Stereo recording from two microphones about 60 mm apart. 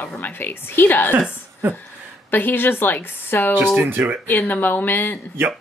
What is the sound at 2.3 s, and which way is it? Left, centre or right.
Speech, left.